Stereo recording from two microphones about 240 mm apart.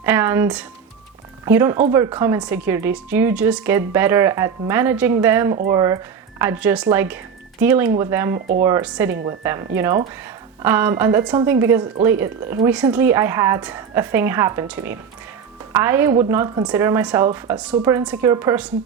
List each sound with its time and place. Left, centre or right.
0.0 s music: centre
1.5 s a woman's voice: centre
8.4 s speech: right
8.6 s a woman's voice: centre